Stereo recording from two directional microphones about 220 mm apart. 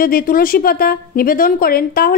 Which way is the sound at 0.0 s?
40° left (ahead or behind).